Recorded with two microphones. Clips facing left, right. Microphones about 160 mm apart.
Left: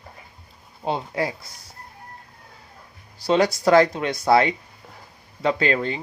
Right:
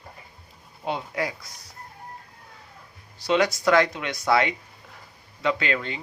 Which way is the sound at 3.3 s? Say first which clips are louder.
Left 3 dB; 35° left (ahead or behind).